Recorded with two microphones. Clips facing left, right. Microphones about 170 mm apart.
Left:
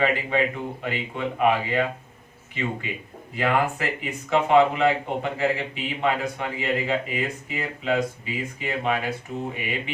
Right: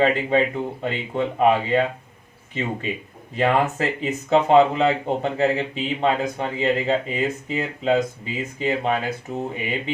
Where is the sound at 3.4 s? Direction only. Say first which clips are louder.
Right 3 dB; 25° right (ahead or behind).